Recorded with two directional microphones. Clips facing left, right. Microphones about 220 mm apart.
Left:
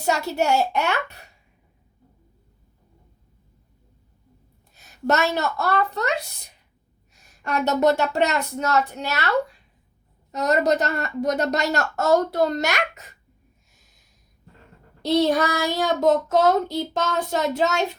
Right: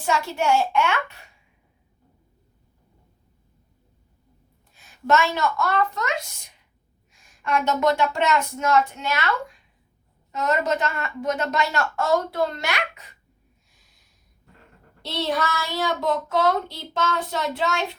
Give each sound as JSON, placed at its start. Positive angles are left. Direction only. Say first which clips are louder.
{"t": 0.0, "sound": "a woman's voice", "louder": "left 1 dB", "side_deg": 40}
{"t": 4.7, "sound": "a woman's voice", "louder": "right 1 dB", "side_deg": 40}
{"t": 10.3, "sound": "a woman's voice", "louder": "left 3 dB", "side_deg": 40}
{"t": 15.0, "sound": "child singing", "louder": "left 7 dB", "side_deg": 45}